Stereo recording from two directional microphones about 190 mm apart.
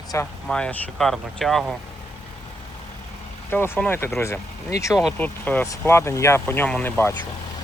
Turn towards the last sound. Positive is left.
turn(degrees=10)  # may be behind; listen again after turning